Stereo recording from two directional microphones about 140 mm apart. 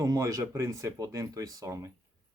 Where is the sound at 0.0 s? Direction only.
20° right (ahead or behind).